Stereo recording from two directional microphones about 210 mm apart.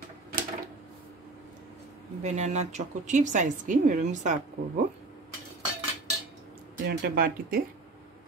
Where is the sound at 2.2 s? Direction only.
35° right (ahead or behind).